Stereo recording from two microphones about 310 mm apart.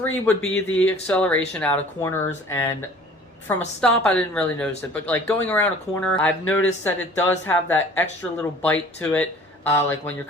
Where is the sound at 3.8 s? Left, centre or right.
Centre.